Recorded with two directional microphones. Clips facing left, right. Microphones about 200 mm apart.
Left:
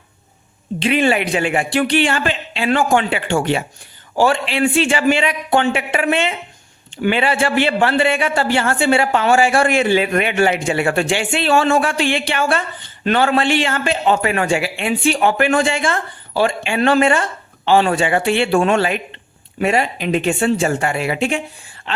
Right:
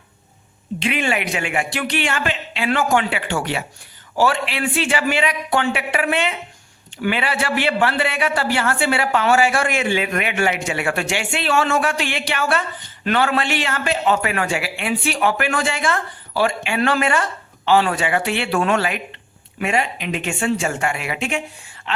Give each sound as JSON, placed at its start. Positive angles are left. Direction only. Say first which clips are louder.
{"t": 0.8, "sound": "a man's voice", "louder": "left 6 dB", "side_deg": 35}